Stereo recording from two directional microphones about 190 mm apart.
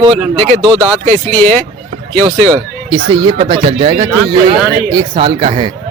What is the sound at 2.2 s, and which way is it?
Speech, 35° right (ahead or behind).